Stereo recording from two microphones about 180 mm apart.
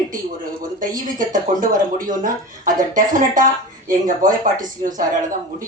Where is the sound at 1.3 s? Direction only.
45° right (ahead or behind).